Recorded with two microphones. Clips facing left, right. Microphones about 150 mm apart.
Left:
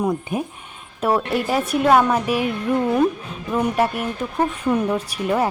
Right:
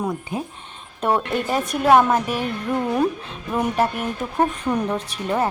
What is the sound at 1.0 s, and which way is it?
A woman's voice, 5° left (ahead or behind).